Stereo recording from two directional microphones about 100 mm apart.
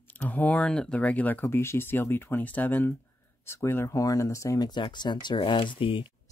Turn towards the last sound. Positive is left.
turn(degrees=60)  # may be behind; listen again after turning